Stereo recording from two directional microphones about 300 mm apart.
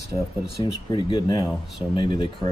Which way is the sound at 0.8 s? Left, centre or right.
Centre.